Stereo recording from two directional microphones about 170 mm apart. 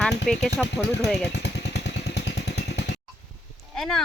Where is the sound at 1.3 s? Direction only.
90° left.